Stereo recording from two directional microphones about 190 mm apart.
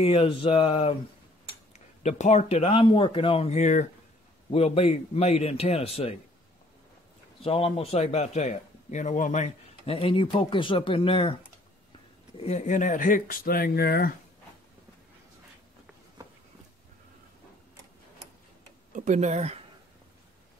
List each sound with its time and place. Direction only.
0.0 s speech: 30° left (ahead or behind)
2.0 s speech: 35° left (ahead or behind)
7.4 s speech: 30° left (ahead or behind)
12.4 s speech: 35° left (ahead or behind); by 14.1 s 55° left (ahead or behind)
18.9 s speech: 40° right (ahead or behind)